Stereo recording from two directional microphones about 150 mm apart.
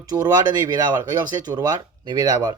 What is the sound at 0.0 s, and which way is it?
Speech, 25° right (ahead or behind).